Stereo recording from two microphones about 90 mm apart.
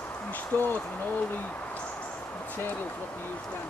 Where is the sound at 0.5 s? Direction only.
25° left (ahead or behind).